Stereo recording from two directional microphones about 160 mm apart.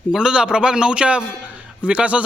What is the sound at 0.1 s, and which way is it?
A man's voice, 5° right (ahead or behind).